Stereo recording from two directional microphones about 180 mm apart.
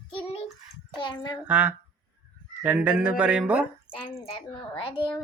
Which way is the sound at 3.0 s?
5° right (ahead or behind).